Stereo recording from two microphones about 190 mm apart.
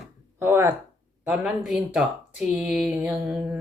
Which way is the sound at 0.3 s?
10° right (ahead or behind).